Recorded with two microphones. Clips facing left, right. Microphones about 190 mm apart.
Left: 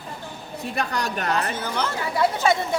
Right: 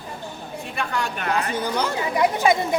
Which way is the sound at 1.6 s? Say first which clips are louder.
Right 3 dB; 10° right (ahead or behind).